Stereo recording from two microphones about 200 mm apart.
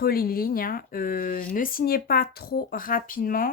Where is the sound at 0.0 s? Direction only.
50° left (ahead or behind).